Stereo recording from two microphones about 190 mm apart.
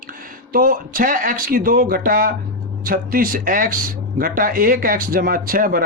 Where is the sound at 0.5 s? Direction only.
50° right (ahead or behind).